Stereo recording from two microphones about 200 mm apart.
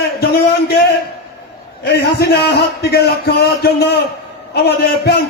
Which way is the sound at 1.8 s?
55° left (ahead or behind).